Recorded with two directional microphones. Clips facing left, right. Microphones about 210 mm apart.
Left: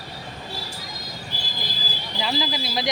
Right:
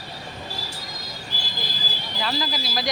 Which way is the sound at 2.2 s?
15° left (ahead or behind).